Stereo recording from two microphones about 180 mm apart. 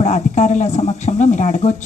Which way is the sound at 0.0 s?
40° left (ahead or behind).